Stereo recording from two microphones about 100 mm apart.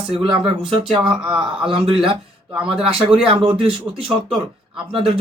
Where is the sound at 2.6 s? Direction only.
65° right (ahead or behind).